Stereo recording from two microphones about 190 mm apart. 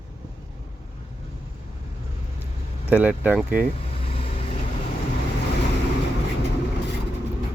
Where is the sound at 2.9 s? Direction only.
10° right (ahead or behind).